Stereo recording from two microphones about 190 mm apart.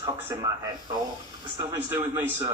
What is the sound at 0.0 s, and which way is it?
A man's voice, 15° right (ahead or behind).